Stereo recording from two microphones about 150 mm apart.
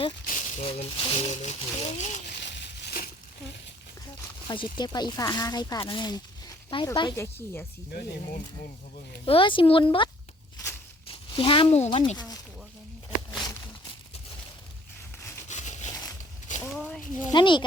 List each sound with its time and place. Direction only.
0.3 s a sound: 55° left (ahead or behind)
0.6 s speech: 40° left (ahead or behind)
2.2 s crushing: 90° left
4.4 s speech: 30° left (ahead or behind)
7.2 s a woman's voice: 15° left (ahead or behind)
9.2 s speech: 35° left (ahead or behind)
11.1 s speech: 35° left (ahead or behind)
12.1 s speech: 25° left (ahead or behind)
15.4 s a sound: 50° left (ahead or behind)
16.7 s speech: 5° left (ahead or behind)
17.0 s speech: 60° left (ahead or behind)
17.3 s speech: 30° left (ahead or behind)